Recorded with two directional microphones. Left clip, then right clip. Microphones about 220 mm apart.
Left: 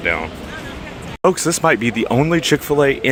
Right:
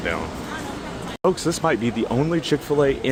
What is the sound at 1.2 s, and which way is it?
Speech, 15° left (ahead or behind).